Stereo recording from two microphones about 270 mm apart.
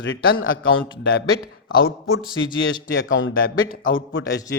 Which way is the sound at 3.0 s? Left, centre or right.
Left.